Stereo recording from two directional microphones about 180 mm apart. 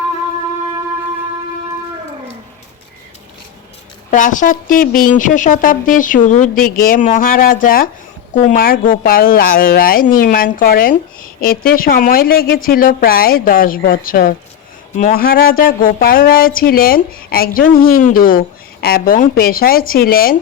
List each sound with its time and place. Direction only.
4.1 s speech: 45° left (ahead or behind)